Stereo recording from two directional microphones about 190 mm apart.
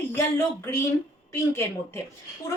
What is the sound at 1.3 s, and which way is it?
Speech, 15° left (ahead or behind).